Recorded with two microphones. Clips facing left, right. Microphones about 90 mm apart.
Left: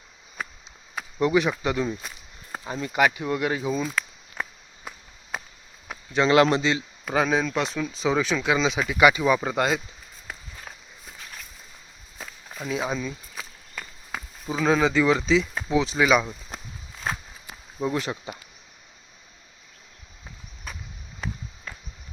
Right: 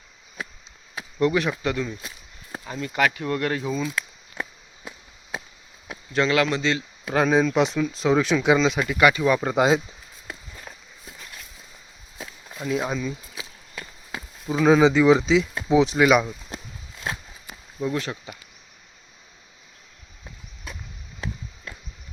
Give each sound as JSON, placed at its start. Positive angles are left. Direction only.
{"t": 1.2, "sound": "speech", "side_deg": 5}
{"t": 2.6, "sound": "speech", "side_deg": 20}
{"t": 6.2, "sound": "speech", "side_deg": 25}
{"t": 6.6, "sound": "speech", "side_deg": 10}
{"t": 8.5, "sound": "speech", "side_deg": 0}
{"t": 9.6, "sound": "speech", "side_deg": -20}
{"t": 12.6, "sound": "speech", "side_deg": 0}
{"t": 14.6, "sound": "speech", "side_deg": -10}
{"t": 16.0, "sound": "speech", "side_deg": -5}
{"t": 17.7, "sound": "speech", "side_deg": 15}